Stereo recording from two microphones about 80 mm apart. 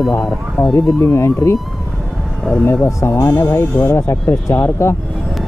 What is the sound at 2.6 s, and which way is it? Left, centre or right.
Speech, left.